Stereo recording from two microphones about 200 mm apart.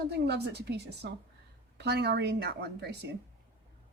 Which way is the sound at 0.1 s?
55° right (ahead or behind).